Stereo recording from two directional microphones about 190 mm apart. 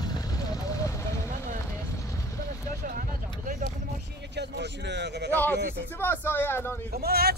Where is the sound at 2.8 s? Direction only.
45° right (ahead or behind).